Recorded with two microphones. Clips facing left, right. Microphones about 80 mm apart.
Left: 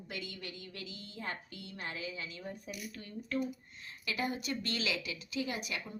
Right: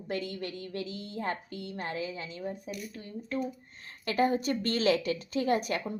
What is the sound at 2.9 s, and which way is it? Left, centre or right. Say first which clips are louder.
Speech: right 4 dB; right.